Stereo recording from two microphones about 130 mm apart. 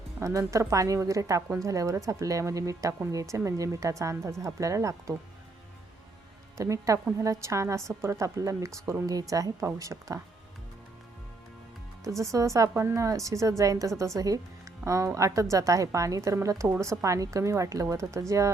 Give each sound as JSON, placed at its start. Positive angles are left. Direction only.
{"t": 0.2, "sound": "a woman's voice", "side_deg": -25}
{"t": 6.6, "sound": "a woman's voice", "side_deg": -25}
{"t": 12.0, "sound": "a woman's voice", "side_deg": -25}